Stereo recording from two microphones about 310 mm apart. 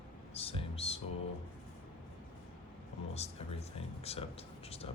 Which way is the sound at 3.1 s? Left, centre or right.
Centre.